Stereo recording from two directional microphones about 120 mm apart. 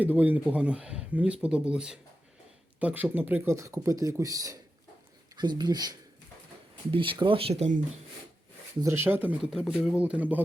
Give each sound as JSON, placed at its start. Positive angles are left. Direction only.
{"t": 0.0, "sound": "speech", "side_deg": -15}
{"t": 6.9, "sound": "speech", "side_deg": -45}
{"t": 8.8, "sound": "speech", "side_deg": -20}
{"t": 9.5, "sound": "speech", "side_deg": -5}